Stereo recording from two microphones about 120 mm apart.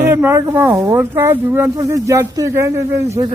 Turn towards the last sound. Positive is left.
turn(degrees=-25)  # may be behind; listen again after turning